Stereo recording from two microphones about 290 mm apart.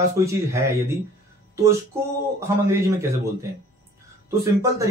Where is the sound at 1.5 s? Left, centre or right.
Centre.